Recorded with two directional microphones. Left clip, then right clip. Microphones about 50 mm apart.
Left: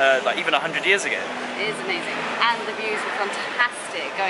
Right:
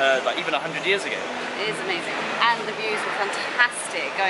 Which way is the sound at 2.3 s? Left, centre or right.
Centre.